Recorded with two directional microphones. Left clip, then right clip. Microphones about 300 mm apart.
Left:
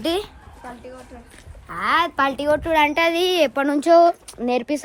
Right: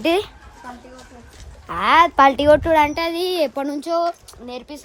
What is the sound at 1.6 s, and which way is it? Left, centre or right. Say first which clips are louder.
A child's voice: right 5 dB; centre.